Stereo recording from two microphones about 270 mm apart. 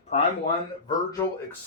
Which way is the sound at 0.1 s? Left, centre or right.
Left.